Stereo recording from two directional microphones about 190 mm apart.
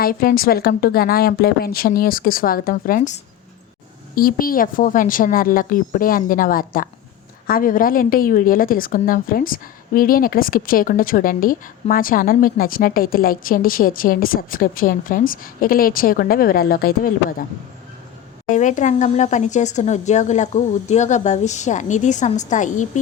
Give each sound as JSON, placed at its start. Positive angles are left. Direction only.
{"t": 0.0, "sound": "a woman's voice", "side_deg": 50}
{"t": 18.5, "sound": "speech", "side_deg": 40}